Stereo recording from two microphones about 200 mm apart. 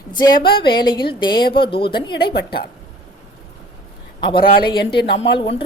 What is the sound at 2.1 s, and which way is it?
Speech, 50° left (ahead or behind).